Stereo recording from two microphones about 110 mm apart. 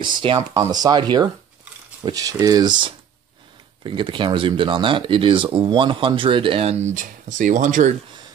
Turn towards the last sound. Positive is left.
turn(degrees=-90)